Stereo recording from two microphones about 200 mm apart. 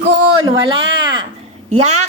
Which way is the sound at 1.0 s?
20° right (ahead or behind).